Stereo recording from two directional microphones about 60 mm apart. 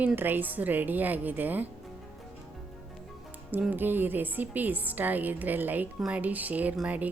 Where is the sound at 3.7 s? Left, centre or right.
Right.